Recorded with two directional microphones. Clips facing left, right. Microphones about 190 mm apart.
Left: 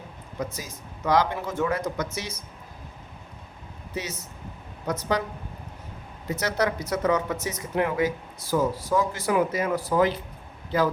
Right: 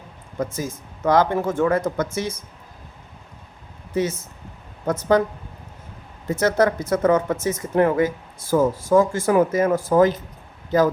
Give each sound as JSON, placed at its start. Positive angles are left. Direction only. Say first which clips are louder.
{"t": 0.3, "sound": "speech", "louder": "right 7 dB", "side_deg": -50}
{"t": 3.9, "sound": "speech", "louder": "right 11 dB", "side_deg": -50}
{"t": 6.2, "sound": "speech", "louder": "right 7 dB", "side_deg": -50}